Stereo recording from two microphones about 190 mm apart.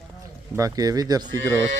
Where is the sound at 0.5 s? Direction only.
20° right (ahead or behind).